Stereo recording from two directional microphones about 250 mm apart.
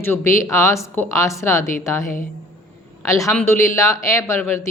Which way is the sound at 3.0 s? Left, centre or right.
Centre.